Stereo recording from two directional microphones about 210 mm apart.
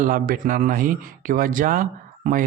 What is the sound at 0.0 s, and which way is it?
Speech, 40° right (ahead or behind).